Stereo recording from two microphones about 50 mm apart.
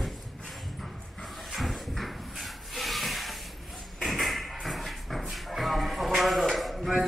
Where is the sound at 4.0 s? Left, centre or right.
Centre.